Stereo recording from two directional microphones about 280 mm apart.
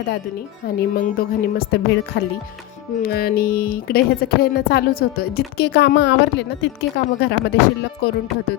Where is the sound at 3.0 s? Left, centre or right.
Left.